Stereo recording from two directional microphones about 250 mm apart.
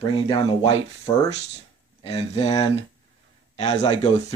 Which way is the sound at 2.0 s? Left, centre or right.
Left.